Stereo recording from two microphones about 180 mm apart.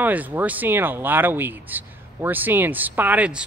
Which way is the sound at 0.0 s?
10° right (ahead or behind).